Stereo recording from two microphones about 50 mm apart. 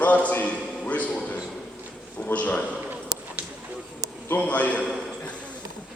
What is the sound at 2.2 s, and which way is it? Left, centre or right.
Speech, left.